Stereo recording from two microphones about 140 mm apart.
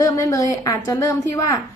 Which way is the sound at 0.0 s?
25° left (ahead or behind).